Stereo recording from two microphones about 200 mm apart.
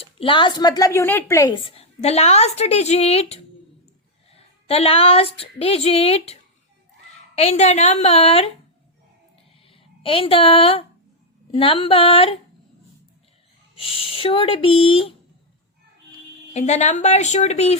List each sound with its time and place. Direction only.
0.0 s speech: 25° left (ahead or behind)
9.6 s speech: 25° left (ahead or behind)
13.7 s speech: 25° left (ahead or behind)
16.6 s speech: 35° left (ahead or behind)